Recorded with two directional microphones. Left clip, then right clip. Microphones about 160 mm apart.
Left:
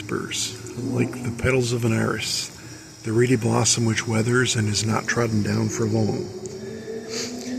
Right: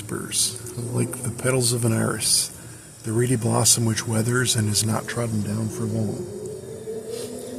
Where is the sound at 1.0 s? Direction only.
10° right (ahead or behind).